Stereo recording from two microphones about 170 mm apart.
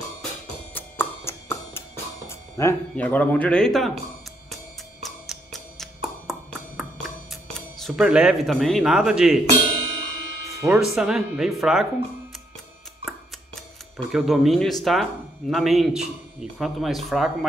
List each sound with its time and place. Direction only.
0.7 s music: 15° left (ahead or behind)
5.0 s music: centre (ahead or behind)
7.8 s a man's voice: 5° right (ahead or behind)
10.6 s a man's voice: 5° right (ahead or behind)
13.9 s a man's voice: centre (ahead or behind)